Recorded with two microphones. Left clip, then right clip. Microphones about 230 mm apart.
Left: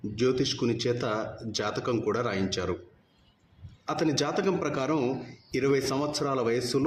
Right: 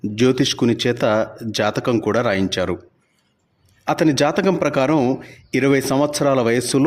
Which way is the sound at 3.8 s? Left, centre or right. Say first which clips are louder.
Right 11 dB; right.